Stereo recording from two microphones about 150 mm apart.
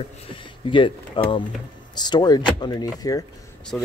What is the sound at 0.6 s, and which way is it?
Speech, 35° left (ahead or behind).